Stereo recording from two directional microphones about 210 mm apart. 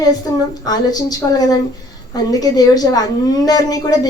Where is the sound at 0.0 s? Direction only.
15° left (ahead or behind).